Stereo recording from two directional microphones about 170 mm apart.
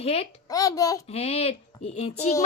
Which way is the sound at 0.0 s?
35° left (ahead or behind).